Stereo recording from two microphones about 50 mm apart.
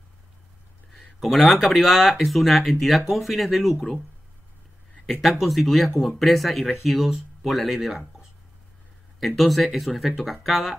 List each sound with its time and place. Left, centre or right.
0.9 s speech: centre
5.4 s speech: centre
9.2 s speech: centre